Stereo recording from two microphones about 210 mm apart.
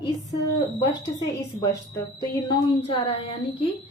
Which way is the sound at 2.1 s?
25° left (ahead or behind).